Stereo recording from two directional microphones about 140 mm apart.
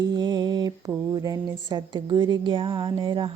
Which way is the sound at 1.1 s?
25° right (ahead or behind).